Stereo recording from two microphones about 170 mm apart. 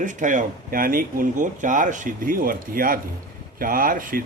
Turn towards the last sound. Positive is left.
turn(degrees=-55)  # may be behind; listen again after turning